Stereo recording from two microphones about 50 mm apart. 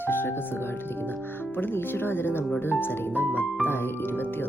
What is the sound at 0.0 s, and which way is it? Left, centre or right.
Music, left.